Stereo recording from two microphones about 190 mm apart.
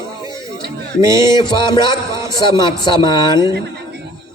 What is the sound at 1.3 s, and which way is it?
Music, 25° left (ahead or behind).